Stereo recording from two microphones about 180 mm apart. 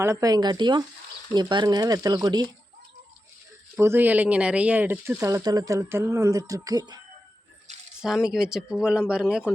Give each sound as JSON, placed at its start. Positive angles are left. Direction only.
{"t": 0.0, "sound": "speech", "side_deg": -15}
{"t": 3.8, "sound": "speech", "side_deg": -10}
{"t": 8.0, "sound": "speech", "side_deg": 0}